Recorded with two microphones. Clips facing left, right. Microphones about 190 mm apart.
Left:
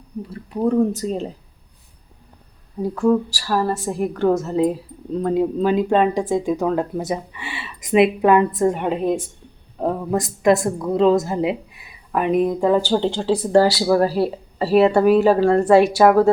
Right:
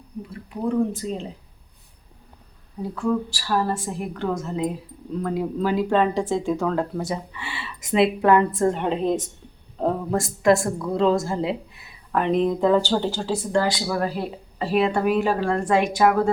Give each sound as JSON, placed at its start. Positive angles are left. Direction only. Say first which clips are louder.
{"t": 0.6, "sound": "speech", "louder": "left 5 dB", "side_deg": 40}
{"t": 2.9, "sound": "speech", "louder": "left 6 dB", "side_deg": 45}
{"t": 5.2, "sound": "speech", "louder": "left 6 dB", "side_deg": 25}
{"t": 13.0, "sound": "speech", "louder": "left 5 dB", "side_deg": 25}